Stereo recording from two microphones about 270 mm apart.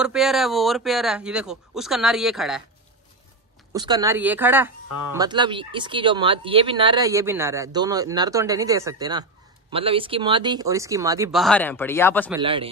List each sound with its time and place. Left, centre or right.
0.0 s a man's voice: centre
3.7 s speech: centre
11.3 s speech: centre
12.4 s speech: centre